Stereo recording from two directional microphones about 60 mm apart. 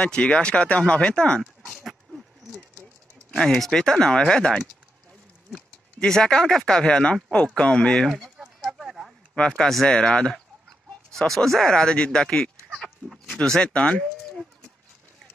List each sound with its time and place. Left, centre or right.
0.0 s speech: centre
1.4 s a sound: centre
3.3 s speech: centre
8.4 s a sound: centre
9.3 s speech: centre
13.4 s livestock: centre